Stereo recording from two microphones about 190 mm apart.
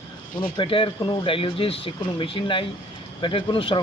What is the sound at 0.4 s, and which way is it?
Speech, 25° left (ahead or behind).